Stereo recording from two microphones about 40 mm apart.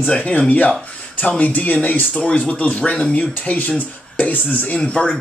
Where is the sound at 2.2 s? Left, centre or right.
Left.